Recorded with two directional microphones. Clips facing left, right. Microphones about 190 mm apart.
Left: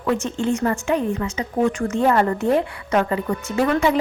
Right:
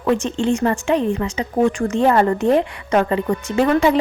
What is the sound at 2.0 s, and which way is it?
Speech, 30° right (ahead or behind).